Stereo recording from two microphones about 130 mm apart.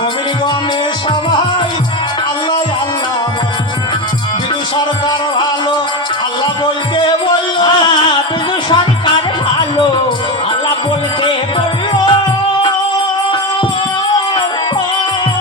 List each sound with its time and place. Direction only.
6.9 s music: 35° left (ahead or behind)
11.9 s music: 40° left (ahead or behind)